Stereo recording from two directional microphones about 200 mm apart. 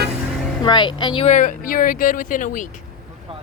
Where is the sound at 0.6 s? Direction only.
20° left (ahead or behind); by 2.6 s 40° left (ahead or behind).